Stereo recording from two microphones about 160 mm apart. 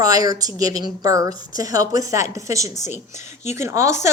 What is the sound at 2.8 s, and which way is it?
Speech, 45° left (ahead or behind).